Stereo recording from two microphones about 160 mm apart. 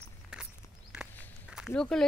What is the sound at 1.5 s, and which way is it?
Walk, 5° right (ahead or behind).